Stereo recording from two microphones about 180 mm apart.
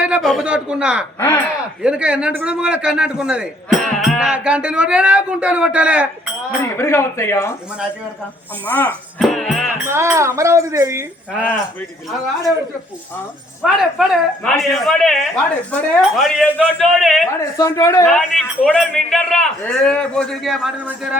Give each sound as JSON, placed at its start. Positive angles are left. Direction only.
{"t": 0.0, "sound": "a man's voice", "side_deg": -5}
{"t": 1.2, "sound": "speech", "side_deg": 10}
{"t": 1.8, "sound": "a man's voice", "side_deg": -5}
{"t": 6.6, "sound": "speech", "side_deg": 15}
{"t": 8.6, "sound": "a man's voice", "side_deg": 10}
{"t": 9.8, "sound": "speech", "side_deg": -15}
{"t": 13.6, "sound": "a man's voice", "side_deg": 0}
{"t": 17.3, "sound": "speech", "side_deg": 15}
{"t": 18.1, "sound": "a man's voice", "side_deg": 0}